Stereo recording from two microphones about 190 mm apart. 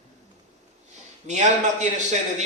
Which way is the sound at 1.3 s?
40° right (ahead or behind).